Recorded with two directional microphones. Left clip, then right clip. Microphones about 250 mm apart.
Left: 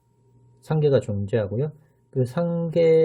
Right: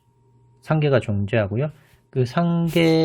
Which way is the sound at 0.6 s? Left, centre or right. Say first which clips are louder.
Right 1 dB; centre.